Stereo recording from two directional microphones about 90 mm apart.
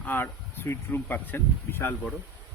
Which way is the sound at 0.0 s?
25° left (ahead or behind).